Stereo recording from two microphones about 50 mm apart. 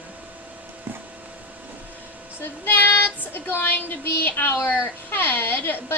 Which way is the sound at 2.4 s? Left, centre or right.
Left.